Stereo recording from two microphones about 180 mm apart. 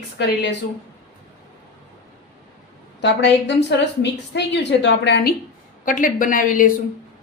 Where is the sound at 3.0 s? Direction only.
75° left (ahead or behind).